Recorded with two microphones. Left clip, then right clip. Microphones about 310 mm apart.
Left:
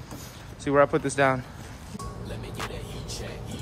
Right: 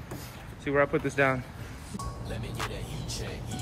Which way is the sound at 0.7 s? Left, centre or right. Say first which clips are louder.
Left 5 dB; centre.